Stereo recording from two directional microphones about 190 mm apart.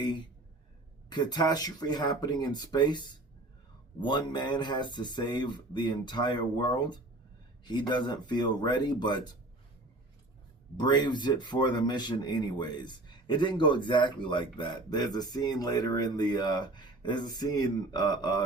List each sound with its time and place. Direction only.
1.1 s speech: 20° left (ahead or behind)
10.8 s speech: 25° left (ahead or behind)